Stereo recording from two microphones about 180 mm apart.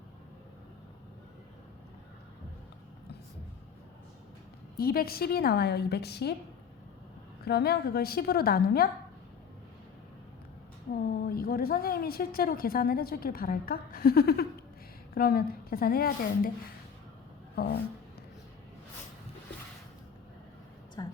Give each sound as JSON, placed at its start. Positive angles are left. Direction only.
{"t": 4.8, "sound": "a woman's voice", "side_deg": 60}
{"t": 7.4, "sound": "a woman's voice", "side_deg": 60}
{"t": 10.9, "sound": "a woman's voice", "side_deg": 55}
{"t": 17.5, "sound": "speech", "side_deg": 60}
{"t": 21.0, "sound": "a sound", "side_deg": 25}